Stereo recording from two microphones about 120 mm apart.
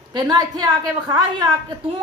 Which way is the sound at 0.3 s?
35° right (ahead or behind).